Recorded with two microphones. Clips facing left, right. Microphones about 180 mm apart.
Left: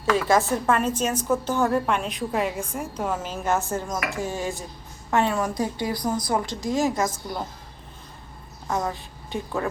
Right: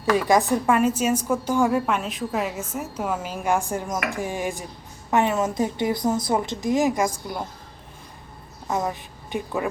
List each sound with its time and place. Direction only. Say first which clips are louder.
0.0 s a woman's voice: right 1 dB; 15° right (ahead or behind)
8.6 s a woman's voice: right 1 dB; 15° right (ahead or behind)